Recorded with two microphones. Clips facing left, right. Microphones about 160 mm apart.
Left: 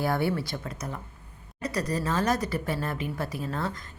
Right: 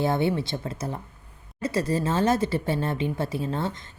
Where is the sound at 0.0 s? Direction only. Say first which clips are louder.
Right 3 dB; 20° right (ahead or behind).